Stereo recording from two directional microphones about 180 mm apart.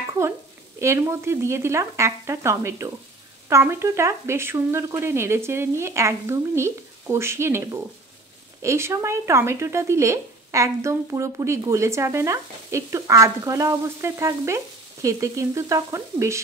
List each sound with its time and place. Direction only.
0.7 s speech: 15° right (ahead or behind)